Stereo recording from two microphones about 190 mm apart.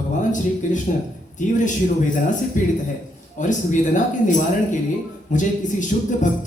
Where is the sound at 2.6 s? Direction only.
45° left (ahead or behind).